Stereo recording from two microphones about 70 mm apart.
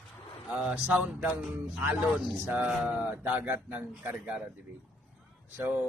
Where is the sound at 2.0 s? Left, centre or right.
Centre.